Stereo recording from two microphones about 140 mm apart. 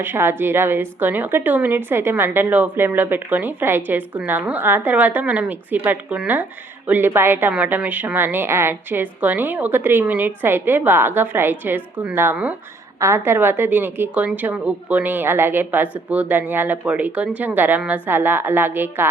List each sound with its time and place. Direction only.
0.0 s a woman's voice: 15° right (ahead or behind)